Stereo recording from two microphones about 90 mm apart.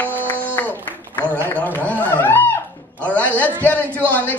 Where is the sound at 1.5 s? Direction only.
20° left (ahead or behind).